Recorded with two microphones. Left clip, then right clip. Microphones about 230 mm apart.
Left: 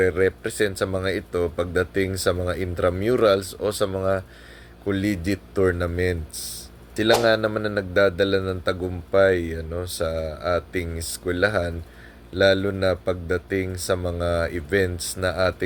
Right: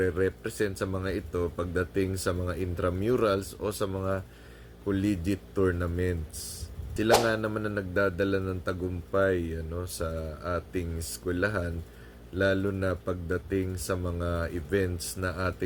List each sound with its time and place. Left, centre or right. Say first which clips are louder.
0.0 s speech: left 7 dB; centre